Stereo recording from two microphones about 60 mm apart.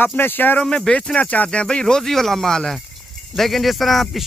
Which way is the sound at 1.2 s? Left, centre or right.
Left.